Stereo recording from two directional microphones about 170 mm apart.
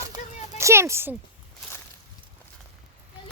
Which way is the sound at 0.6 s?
15° right (ahead or behind).